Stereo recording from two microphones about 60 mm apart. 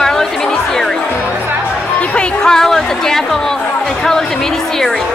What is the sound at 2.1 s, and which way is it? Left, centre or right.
Speech, centre.